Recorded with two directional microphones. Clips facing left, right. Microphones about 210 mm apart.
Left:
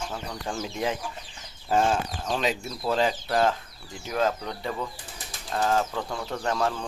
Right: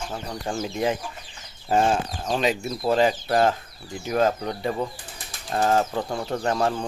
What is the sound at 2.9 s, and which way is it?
Speech, 55° right (ahead or behind).